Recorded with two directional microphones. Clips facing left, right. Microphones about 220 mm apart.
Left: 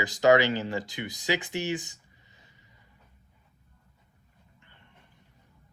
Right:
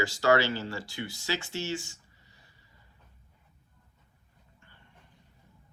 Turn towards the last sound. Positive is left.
turn(degrees=20)  # may be behind; listen again after turning